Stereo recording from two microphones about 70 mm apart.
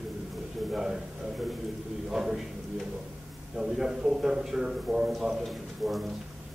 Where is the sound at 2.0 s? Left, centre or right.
Centre.